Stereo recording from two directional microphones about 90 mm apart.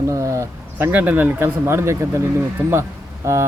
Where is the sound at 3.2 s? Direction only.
30° right (ahead or behind).